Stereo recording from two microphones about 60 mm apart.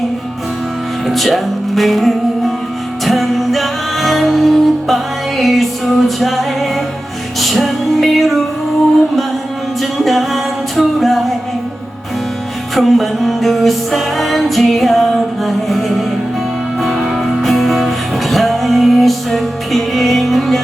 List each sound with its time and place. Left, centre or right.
1.0 s music: centre
9.8 s music: centre
12.7 s music: centre